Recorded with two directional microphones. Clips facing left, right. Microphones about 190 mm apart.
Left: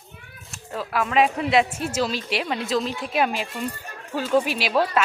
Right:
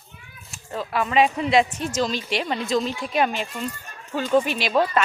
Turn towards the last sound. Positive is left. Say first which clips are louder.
# right 1 dB
turn(degrees=5)  # may be behind; listen again after turning